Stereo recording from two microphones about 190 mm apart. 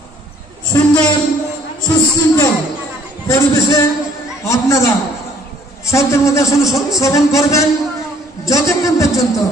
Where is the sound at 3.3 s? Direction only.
15° left (ahead or behind).